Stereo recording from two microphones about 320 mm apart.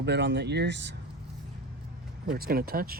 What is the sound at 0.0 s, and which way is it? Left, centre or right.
Speech, right.